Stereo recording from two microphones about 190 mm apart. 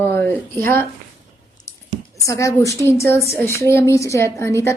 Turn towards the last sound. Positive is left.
turn(degrees=15)  # may be behind; listen again after turning